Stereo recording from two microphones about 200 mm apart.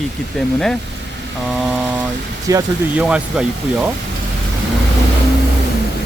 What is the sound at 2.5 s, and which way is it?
Speech, 15° right (ahead or behind).